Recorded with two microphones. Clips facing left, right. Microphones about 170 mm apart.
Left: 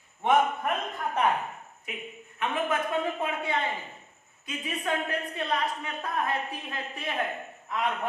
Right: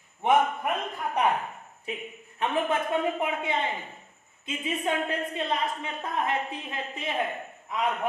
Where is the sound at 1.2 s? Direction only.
15° right (ahead or behind).